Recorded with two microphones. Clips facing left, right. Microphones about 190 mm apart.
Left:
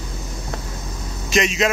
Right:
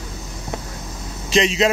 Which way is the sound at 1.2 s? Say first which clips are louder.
Right 2 dB; 30° right (ahead or behind).